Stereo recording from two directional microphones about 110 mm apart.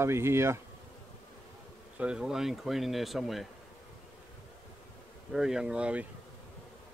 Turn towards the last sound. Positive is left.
turn(degrees=-10)  # may be behind; listen again after turning